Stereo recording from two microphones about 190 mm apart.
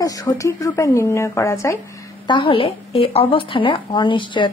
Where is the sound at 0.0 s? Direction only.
20° left (ahead or behind).